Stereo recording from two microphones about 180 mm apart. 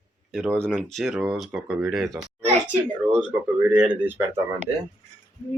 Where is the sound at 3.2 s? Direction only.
5° right (ahead or behind).